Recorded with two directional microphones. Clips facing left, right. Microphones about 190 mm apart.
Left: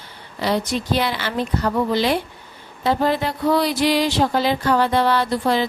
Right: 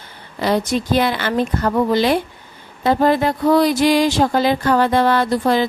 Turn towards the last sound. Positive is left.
turn(degrees=-50)  # may be behind; listen again after turning